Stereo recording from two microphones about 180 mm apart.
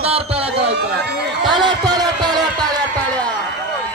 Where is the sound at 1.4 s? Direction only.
25° right (ahead or behind).